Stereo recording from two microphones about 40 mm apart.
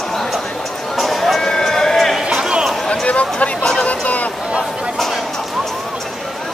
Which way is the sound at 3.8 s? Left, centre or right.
Left.